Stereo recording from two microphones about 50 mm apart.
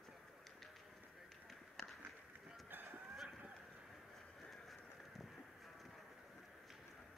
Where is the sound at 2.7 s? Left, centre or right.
Right.